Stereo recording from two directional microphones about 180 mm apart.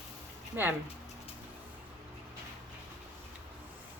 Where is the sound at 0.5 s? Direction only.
10° right (ahead or behind).